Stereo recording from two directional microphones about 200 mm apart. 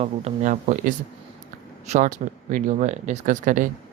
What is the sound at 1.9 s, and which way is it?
Speech, 40° right (ahead or behind).